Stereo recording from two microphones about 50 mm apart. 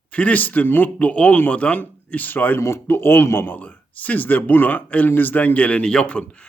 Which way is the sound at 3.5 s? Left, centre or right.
Left.